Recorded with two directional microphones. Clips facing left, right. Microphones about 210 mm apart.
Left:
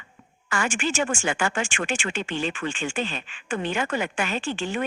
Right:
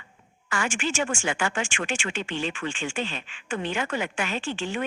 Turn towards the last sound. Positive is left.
turn(degrees=40)  # may be behind; listen again after turning